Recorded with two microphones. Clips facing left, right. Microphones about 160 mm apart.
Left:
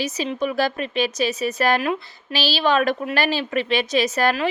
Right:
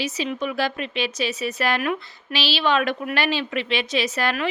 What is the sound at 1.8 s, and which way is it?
Speech, 25° left (ahead or behind).